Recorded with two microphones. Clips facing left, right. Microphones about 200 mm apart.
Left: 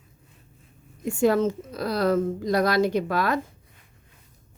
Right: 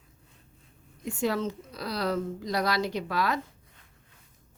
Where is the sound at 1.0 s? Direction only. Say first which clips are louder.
Left 8 dB; 50° left (ahead or behind).